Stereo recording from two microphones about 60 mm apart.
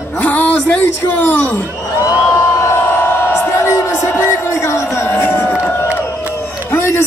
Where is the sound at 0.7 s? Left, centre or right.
Left.